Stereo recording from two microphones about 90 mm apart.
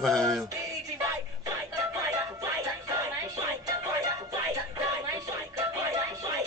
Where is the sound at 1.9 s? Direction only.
35° right (ahead or behind).